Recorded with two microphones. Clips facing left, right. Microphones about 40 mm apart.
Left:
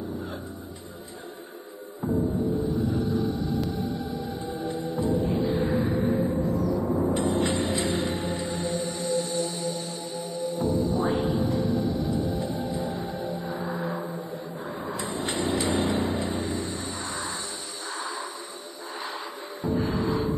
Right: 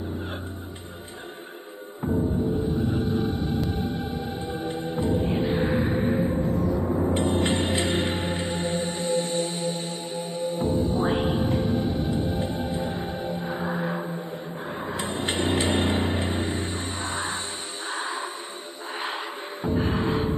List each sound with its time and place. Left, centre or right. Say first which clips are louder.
2.4 s music: right 1 dB; right
14.8 s a sound: right 2 dB; right
17.8 s music: right 3 dB; right